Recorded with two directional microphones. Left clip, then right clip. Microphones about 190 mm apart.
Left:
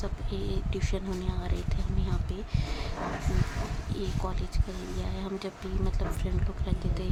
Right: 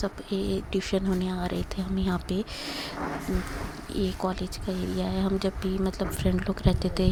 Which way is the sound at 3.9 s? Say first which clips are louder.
Right 8 dB; 30° right (ahead or behind).